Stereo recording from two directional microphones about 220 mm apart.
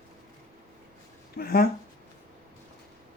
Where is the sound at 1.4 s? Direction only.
45° left (ahead or behind).